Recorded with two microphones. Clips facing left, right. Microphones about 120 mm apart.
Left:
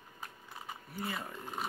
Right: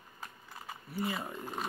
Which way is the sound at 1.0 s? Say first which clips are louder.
Right 4 dB; 15° right (ahead or behind).